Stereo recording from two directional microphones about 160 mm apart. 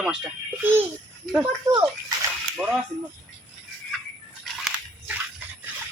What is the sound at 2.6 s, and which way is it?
Speech, centre (ahead or behind).